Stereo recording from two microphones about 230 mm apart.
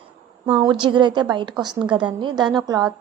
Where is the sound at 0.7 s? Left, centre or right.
Centre.